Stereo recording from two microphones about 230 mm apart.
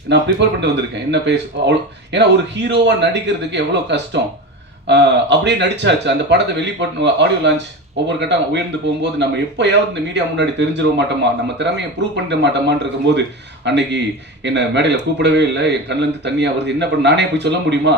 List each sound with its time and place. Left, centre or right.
0.1 s speech: right
12.1 s speech: right